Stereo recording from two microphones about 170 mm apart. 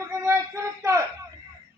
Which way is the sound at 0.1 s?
15° right (ahead or behind).